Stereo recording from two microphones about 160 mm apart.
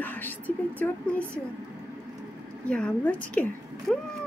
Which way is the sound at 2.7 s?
10° left (ahead or behind).